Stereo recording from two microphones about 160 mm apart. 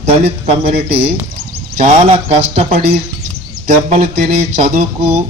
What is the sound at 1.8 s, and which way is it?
Speech, 40° right (ahead or behind).